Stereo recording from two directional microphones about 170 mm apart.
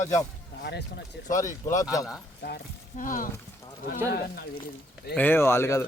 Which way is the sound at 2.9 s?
50° left (ahead or behind).